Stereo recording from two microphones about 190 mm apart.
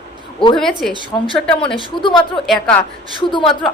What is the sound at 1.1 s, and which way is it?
Speech, 15° left (ahead or behind).